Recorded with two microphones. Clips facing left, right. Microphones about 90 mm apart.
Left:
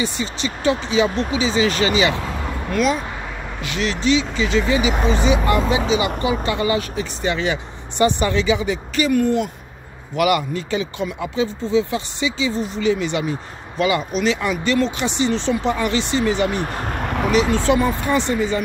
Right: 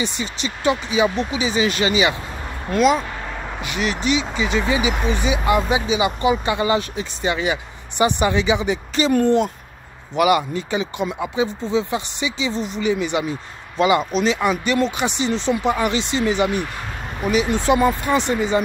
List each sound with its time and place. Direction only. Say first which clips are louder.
0.0 s speech: left 2 dB; 20° right (ahead or behind)
16.6 s speech: left 6 dB; 45° left (ahead or behind)
17.3 s speech: even; 15° right (ahead or behind)